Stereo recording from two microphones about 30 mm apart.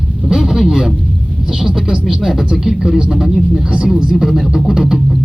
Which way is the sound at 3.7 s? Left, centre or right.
Right.